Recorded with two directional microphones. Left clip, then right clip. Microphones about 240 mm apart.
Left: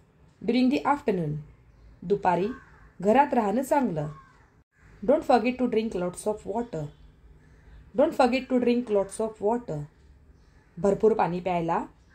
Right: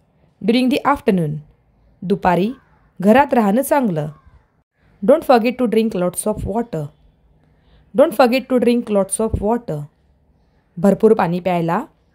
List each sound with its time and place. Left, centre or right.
0.5 s a woman's voice: right
7.9 s a woman's voice: right